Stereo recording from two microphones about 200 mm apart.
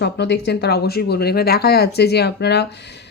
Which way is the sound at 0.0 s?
55° left (ahead or behind).